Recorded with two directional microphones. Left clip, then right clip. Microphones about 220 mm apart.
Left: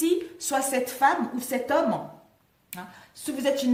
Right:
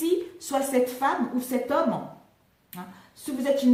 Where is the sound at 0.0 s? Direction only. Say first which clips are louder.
Left 1 dB; 45° left (ahead or behind).